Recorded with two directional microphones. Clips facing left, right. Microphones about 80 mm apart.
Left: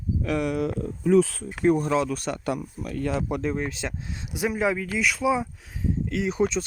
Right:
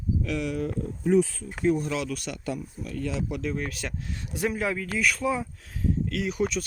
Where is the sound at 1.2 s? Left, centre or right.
Left.